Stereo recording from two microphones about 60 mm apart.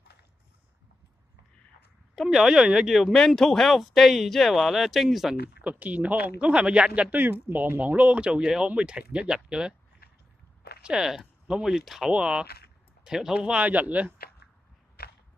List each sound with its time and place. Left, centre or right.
2.2 s speech: centre
3.1 s speech: centre
5.6 s a man's voice: right
11.0 s speech: centre
12.1 s a man's voice: centre
13.0 s speech: centre
13.6 s a man's voice: right